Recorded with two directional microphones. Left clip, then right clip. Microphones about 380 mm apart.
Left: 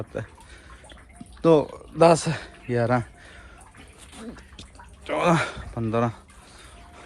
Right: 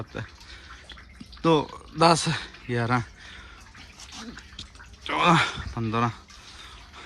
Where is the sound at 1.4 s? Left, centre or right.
Centre.